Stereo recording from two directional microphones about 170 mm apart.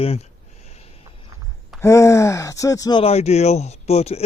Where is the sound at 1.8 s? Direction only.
15° left (ahead or behind).